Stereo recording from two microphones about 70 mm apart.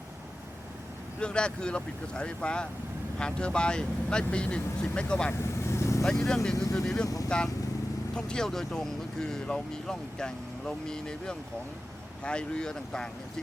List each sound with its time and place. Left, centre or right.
1.2 s speech: centre
5.4 s vehicle: left
6.1 s speech: centre